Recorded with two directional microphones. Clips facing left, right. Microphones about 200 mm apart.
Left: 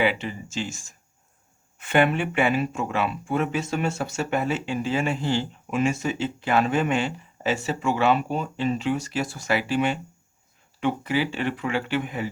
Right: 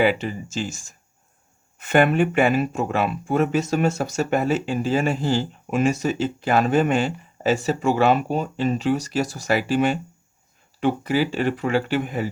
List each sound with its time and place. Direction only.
0.0 s speech: 40° right (ahead or behind)